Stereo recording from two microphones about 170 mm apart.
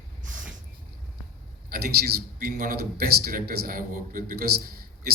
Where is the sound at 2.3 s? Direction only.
55° right (ahead or behind).